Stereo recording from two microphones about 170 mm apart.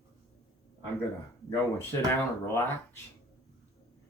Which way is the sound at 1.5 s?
15° left (ahead or behind).